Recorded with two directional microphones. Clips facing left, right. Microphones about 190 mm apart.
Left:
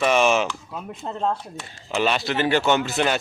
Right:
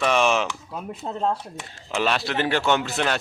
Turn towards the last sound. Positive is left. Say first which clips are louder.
# left 2 dB
turn(degrees=0)  # may be behind; listen again after turning